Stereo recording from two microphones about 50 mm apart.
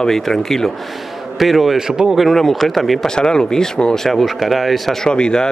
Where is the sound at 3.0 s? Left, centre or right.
Centre.